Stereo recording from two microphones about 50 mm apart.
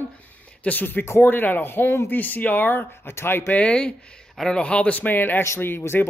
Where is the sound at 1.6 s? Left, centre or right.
Left.